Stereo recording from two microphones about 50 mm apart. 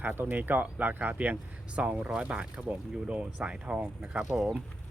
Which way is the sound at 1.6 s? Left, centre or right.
Right.